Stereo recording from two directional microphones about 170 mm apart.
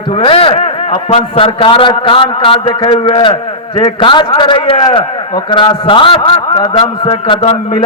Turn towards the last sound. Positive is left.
turn(degrees=30)  # may be behind; listen again after turning